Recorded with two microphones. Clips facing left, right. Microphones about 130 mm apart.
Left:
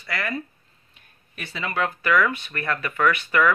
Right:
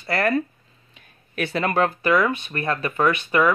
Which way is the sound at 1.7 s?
30° right (ahead or behind).